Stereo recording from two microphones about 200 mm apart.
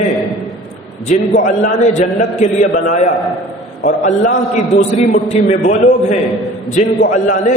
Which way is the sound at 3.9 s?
35° left (ahead or behind).